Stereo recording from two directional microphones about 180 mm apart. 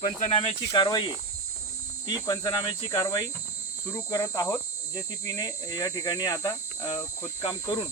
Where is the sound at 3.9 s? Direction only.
15° left (ahead or behind).